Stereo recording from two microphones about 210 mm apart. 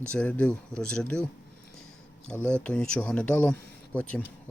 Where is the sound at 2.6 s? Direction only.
5° left (ahead or behind).